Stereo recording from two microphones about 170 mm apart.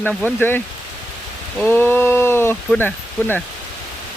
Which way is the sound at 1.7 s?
10° left (ahead or behind).